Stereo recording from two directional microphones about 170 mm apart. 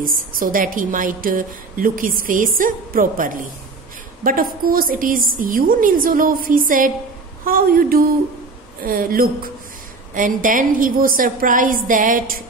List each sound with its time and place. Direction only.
0.0 s a woman's voice: 55° right (ahead or behind)